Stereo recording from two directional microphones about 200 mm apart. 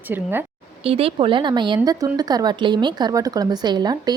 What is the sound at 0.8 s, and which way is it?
Speech, 30° right (ahead or behind).